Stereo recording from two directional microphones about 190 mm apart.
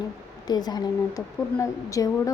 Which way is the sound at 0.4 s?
20° left (ahead or behind).